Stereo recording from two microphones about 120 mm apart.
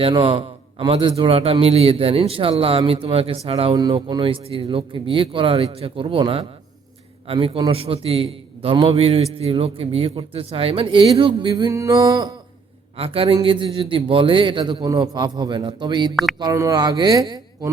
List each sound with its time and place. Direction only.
0.0 s a man's voice: 50° right (ahead or behind)
11.7 s music: 25° right (ahead or behind)
13.0 s a man's voice: 50° right (ahead or behind)
16.4 s speech: 30° right (ahead or behind)